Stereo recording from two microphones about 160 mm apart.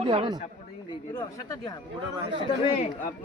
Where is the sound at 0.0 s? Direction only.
35° right (ahead or behind).